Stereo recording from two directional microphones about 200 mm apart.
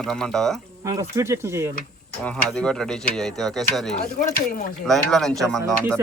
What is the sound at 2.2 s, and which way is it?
Mechanisms, 5° left (ahead or behind).